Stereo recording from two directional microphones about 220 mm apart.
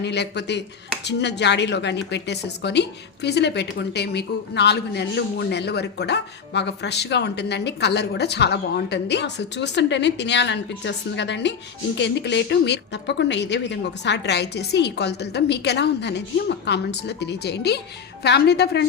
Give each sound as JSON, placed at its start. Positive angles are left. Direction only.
{"t": 0.0, "sound": "a woman's voice", "side_deg": 50}